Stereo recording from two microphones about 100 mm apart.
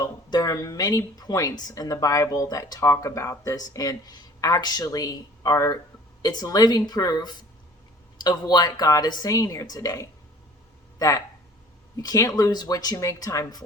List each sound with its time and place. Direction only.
0.0 s speech: 40° left (ahead or behind)
11.9 s speech: 35° left (ahead or behind)